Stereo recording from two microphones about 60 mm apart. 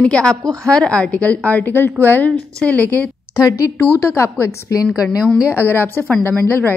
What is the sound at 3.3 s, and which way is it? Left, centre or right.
Speech, left.